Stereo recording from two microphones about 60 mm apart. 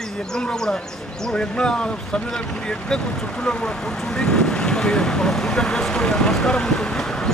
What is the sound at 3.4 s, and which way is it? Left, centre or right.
Speech, centre.